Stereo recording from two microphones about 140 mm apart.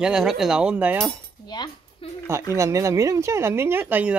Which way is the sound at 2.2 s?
20° right (ahead or behind).